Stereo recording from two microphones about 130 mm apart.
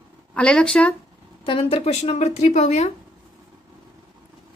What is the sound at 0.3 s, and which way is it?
Speech, 10° left (ahead or behind).